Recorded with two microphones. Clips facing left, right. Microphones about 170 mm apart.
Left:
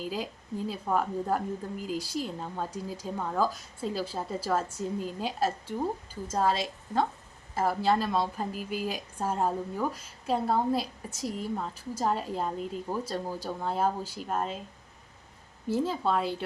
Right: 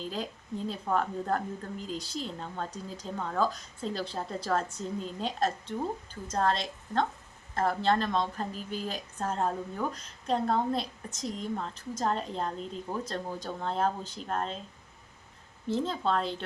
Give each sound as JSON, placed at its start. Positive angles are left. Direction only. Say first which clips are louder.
{"t": 0.0, "sound": "a woman's voice", "louder": "left 2 dB", "side_deg": 10}
{"t": 15.6, "sound": "a woman's voice", "louder": "left 2 dB", "side_deg": 10}